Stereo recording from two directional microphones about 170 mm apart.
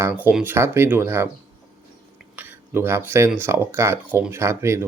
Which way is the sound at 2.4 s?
10° right (ahead or behind).